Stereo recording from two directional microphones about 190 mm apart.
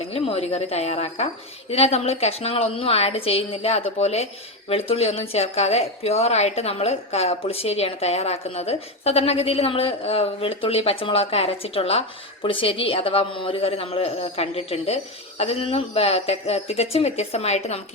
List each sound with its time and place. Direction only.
0.0 s a woman's voice: 30° left (ahead or behind)